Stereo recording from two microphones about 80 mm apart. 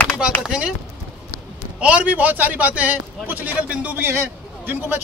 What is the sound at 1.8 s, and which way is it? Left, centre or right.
A man's voice, centre.